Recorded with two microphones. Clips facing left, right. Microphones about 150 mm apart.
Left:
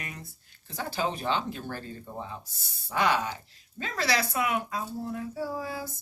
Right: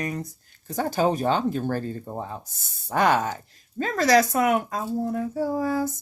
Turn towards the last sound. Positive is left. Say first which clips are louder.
# right 10 dB
turn(degrees=-45)  # may be behind; listen again after turning